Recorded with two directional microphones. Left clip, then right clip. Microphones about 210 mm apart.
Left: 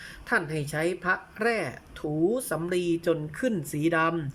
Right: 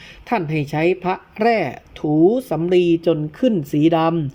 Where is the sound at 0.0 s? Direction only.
15° right (ahead or behind).